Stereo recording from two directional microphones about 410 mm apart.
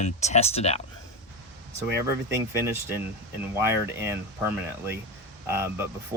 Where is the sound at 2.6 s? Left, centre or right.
Centre.